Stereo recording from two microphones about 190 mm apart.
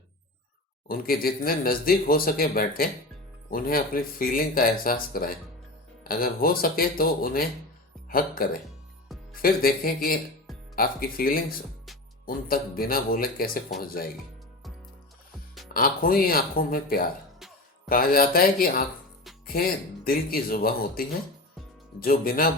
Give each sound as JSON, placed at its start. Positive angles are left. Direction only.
{"t": 0.9, "sound": "speech", "side_deg": 50}
{"t": 9.3, "sound": "speech", "side_deg": 50}
{"t": 15.7, "sound": "speech", "side_deg": 50}
{"t": 20.1, "sound": "speech", "side_deg": 50}
{"t": 22.0, "sound": "speech", "side_deg": 50}